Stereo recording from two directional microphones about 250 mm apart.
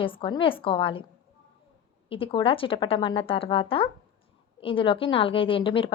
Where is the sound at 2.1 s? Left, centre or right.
Left.